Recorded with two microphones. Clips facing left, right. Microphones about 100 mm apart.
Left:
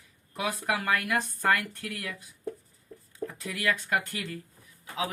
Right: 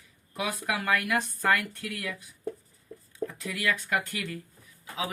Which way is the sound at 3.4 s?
30° left (ahead or behind).